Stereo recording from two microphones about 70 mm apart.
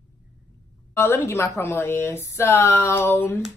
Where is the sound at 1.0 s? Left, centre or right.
Left.